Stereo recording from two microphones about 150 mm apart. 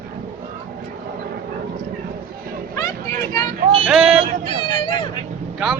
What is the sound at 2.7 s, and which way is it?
Vehicle, 20° left (ahead or behind).